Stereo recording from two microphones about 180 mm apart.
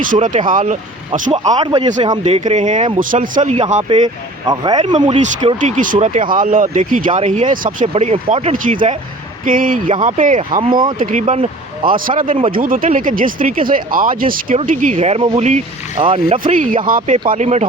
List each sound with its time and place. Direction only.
0.0 s speech: 45° right (ahead or behind)
1.3 s speech: 30° right (ahead or behind)
4.4 s speech: 20° right (ahead or behind)
5.5 s speech: 45° right (ahead or behind)
7.9 s speech: 35° right (ahead or behind)
11.9 s speech: 50° right (ahead or behind); by 16.4 s 30° right (ahead or behind)
16.4 s speech: 45° right (ahead or behind)